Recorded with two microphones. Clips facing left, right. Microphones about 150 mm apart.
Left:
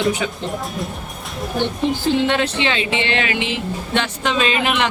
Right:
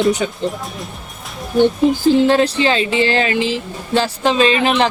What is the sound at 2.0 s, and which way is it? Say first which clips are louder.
Speech: right 6 dB; 35° right (ahead or behind).